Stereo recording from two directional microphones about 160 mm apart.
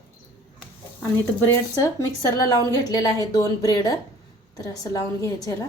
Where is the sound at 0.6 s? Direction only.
10° left (ahead or behind).